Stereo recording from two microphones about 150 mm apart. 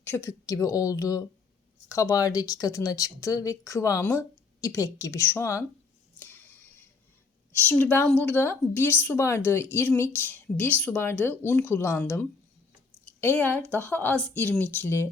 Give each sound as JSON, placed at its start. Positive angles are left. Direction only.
{"t": 0.0, "sound": "speech", "side_deg": 15}
{"t": 6.1, "sound": "a sound", "side_deg": 15}
{"t": 7.6, "sound": "a woman's voice", "side_deg": 10}